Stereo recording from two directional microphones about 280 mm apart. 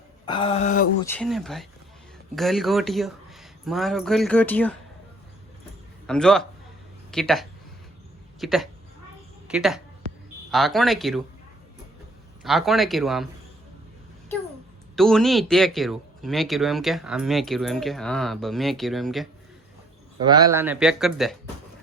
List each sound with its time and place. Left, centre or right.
0.3 s a sound: centre
1.0 s speech: centre
6.1 s speech: centre
12.4 s speech: centre
14.9 s speech: centre
20.2 s speech: centre